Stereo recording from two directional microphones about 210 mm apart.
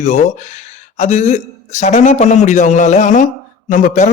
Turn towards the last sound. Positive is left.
turn(degrees=35)  # may be behind; listen again after turning